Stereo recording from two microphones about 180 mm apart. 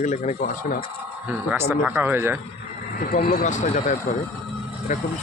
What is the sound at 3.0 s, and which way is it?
Speech, 55° left (ahead or behind).